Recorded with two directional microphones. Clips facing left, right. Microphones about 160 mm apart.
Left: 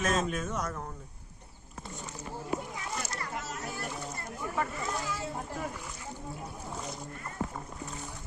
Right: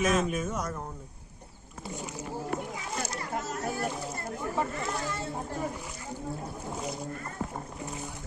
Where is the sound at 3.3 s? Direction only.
45° right (ahead or behind).